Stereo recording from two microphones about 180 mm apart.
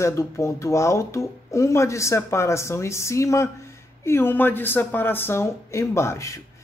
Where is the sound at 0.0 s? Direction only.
15° left (ahead or behind).